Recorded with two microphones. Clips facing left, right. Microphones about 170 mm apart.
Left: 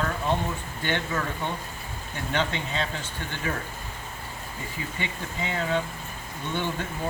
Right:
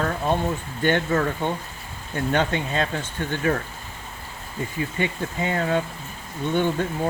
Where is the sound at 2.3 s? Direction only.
50° right (ahead or behind).